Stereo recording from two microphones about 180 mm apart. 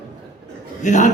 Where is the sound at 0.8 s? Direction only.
40° left (ahead or behind).